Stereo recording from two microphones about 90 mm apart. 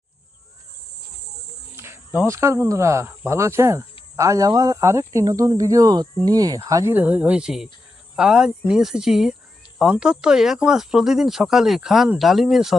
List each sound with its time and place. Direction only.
1.7 s speech: 25° right (ahead or behind)
6.9 s speech: 20° right (ahead or behind); by 12.7 s 5° right (ahead or behind)